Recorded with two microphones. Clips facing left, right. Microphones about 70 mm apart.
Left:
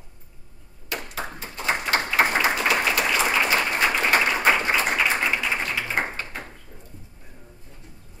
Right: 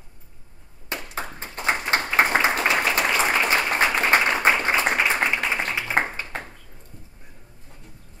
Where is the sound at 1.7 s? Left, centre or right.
Right.